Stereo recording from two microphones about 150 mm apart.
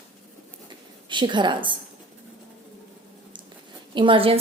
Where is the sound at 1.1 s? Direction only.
30° right (ahead or behind).